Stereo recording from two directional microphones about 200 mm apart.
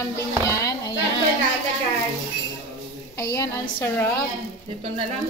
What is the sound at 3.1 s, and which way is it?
A woman's voice, 15° left (ahead or behind).